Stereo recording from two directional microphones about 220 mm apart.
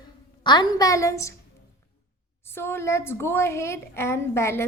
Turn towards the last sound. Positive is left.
turn(degrees=10)  # may be behind; listen again after turning